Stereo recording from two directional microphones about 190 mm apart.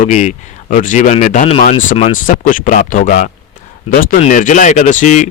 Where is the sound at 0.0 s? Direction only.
40° left (ahead or behind).